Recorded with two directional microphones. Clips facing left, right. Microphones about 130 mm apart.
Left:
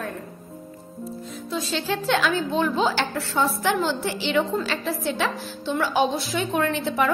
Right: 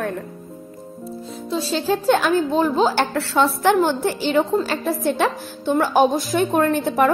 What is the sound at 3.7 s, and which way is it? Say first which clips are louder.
A woman's voice: right 6 dB; 50° right (ahead or behind).